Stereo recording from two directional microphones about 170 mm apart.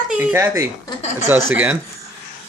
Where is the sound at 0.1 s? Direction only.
10° right (ahead or behind).